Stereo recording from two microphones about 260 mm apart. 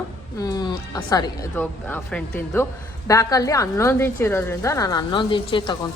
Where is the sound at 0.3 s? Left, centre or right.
Centre.